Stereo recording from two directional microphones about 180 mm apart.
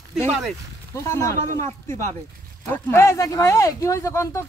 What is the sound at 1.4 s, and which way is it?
Speech, 40° right (ahead or behind).